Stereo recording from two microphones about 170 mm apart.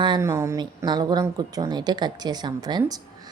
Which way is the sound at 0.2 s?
15° right (ahead or behind).